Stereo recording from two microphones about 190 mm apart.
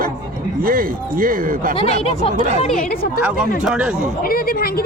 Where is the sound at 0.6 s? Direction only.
50° right (ahead or behind).